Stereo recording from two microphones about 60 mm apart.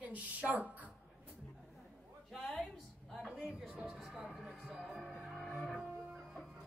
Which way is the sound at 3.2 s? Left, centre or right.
Centre.